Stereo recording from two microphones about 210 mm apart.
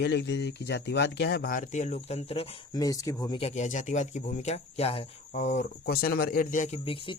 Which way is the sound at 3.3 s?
30° left (ahead or behind).